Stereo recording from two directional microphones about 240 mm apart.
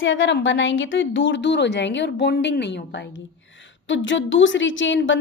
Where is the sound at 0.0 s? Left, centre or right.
Left.